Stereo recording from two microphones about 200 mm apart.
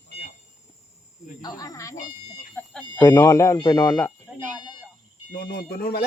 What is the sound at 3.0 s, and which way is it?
Speech, 15° left (ahead or behind).